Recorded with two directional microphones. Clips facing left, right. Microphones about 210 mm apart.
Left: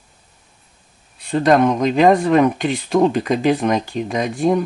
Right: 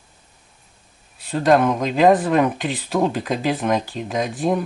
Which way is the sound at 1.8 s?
5° right (ahead or behind).